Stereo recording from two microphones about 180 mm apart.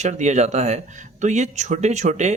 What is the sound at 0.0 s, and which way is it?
Speech, 40° right (ahead or behind).